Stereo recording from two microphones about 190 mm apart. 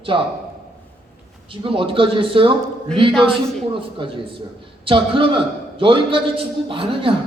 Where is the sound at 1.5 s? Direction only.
25° right (ahead or behind).